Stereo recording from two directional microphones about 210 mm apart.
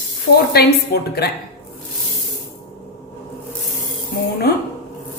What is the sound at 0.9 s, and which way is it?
Speech, 50° left (ahead or behind).